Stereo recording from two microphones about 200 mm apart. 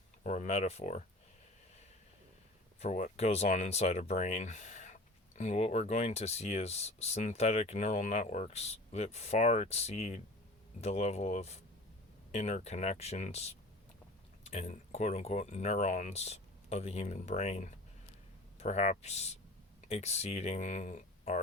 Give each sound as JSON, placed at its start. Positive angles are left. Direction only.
{"t": 0.2, "sound": "speech", "side_deg": 35}
{"t": 2.8, "sound": "speech", "side_deg": 35}